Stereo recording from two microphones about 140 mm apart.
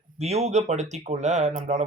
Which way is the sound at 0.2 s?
50° right (ahead or behind).